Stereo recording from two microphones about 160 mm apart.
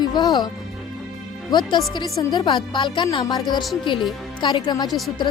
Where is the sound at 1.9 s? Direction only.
25° left (ahead or behind).